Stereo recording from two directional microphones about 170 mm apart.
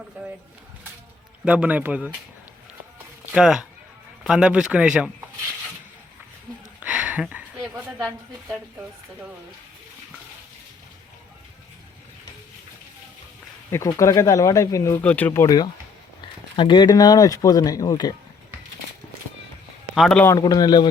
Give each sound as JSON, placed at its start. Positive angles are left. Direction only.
{"t": 1.5, "sound": "speech", "side_deg": -10}
{"t": 3.3, "sound": "speech", "side_deg": -5}
{"t": 6.7, "sound": "a sound", "side_deg": -5}
{"t": 13.7, "sound": "speech", "side_deg": 20}
{"t": 20.0, "sound": "speech", "side_deg": 5}
{"t": 20.2, "sound": "speech", "side_deg": 25}